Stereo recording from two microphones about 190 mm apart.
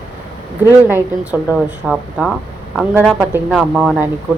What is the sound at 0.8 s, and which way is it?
Speech, 10° right (ahead or behind).